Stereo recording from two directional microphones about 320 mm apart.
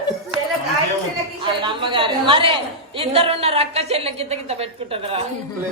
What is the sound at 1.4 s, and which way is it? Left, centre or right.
A woman's voice, centre.